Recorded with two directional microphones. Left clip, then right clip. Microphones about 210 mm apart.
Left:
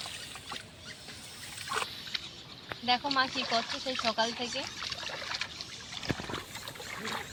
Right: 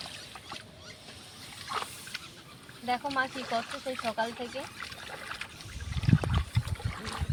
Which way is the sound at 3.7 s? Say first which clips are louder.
Left 2 dB; 35° right (ahead or behind).